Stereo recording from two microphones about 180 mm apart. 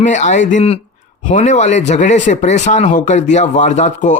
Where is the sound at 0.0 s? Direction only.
45° left (ahead or behind).